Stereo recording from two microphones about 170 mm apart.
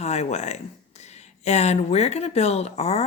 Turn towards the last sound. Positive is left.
turn(degrees=40)  # may be behind; listen again after turning